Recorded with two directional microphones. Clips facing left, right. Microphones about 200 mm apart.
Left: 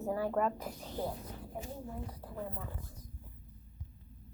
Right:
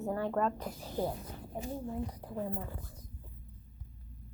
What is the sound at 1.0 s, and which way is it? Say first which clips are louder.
Speech: right 4 dB; 15° right (ahead or behind).